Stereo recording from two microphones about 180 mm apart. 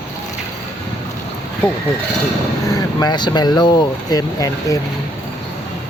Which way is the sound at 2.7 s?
20° left (ahead or behind).